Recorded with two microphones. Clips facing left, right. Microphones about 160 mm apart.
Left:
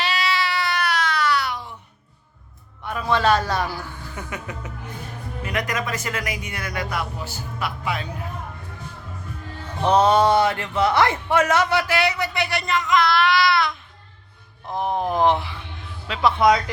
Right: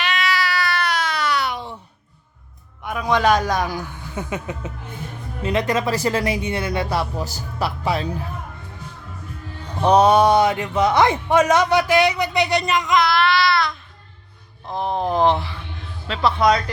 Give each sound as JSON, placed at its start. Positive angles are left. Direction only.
{"t": 0.0, "sound": "baby cry", "side_deg": 30}
{"t": 0.8, "sound": "baby cry", "side_deg": 5}
{"t": 1.0, "sound": "baby cry", "side_deg": -20}
{"t": 2.8, "sound": "speech", "side_deg": -15}
{"t": 9.8, "sound": "speech", "side_deg": -15}
{"t": 14.6, "sound": "a sound", "side_deg": 15}
{"t": 15.2, "sound": "a man's voice", "side_deg": 15}